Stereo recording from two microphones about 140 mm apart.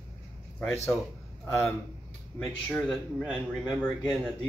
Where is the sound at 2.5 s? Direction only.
5° left (ahead or behind).